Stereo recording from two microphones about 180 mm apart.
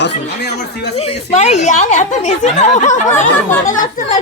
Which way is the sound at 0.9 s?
35° left (ahead or behind).